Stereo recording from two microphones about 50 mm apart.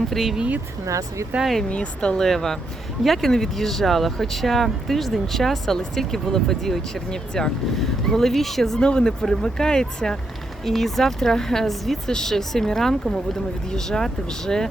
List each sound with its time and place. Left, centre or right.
0.1 s speech: centre
0.9 s speech: right
1.7 s speech: left
2.1 s speech: centre